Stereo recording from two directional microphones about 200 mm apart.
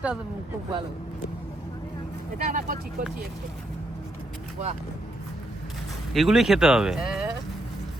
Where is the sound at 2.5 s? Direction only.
40° right (ahead or behind).